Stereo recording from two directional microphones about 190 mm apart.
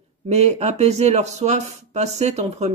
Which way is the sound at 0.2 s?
35° right (ahead or behind).